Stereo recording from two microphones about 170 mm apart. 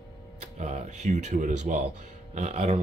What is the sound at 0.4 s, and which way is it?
Speech, 40° right (ahead or behind).